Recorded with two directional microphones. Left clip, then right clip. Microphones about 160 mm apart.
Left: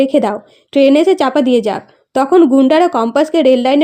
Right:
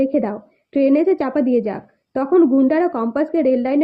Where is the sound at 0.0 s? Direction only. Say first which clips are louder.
Left 7 dB; 30° left (ahead or behind).